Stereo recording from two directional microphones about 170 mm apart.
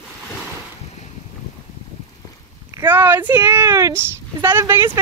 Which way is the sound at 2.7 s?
10° right (ahead or behind).